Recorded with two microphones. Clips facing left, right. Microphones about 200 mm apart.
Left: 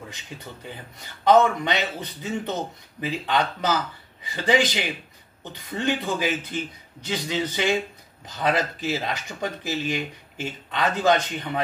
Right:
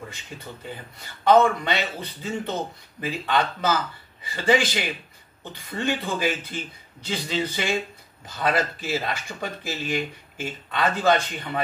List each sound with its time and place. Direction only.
1.2 s speech: 15° left (ahead or behind)